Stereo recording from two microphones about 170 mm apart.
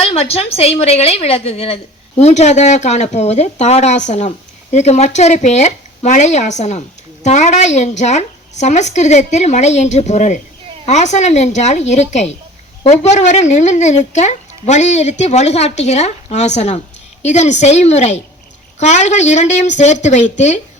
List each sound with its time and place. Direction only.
0.0 s a woman's voice: 35° left (ahead or behind)